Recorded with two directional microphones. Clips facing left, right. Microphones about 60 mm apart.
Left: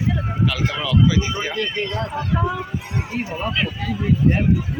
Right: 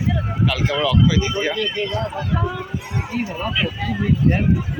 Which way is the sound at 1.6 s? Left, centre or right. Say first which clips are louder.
Right 1 dB; left.